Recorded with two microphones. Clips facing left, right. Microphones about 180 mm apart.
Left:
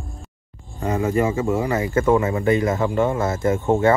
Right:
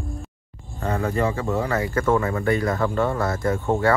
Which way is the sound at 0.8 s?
15° left (ahead or behind).